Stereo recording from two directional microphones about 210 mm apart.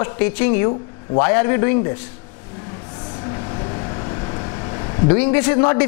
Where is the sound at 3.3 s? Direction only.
25° left (ahead or behind).